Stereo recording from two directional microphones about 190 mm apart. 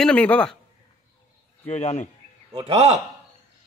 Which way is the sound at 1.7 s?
35° left (ahead or behind).